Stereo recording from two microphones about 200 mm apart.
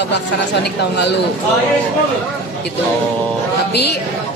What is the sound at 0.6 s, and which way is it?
Speech, 60° left (ahead or behind).